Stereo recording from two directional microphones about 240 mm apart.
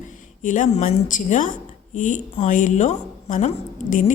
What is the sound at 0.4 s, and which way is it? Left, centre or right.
A woman's voice, left.